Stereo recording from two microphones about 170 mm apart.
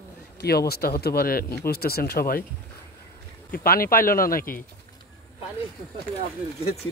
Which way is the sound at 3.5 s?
60° left (ahead or behind).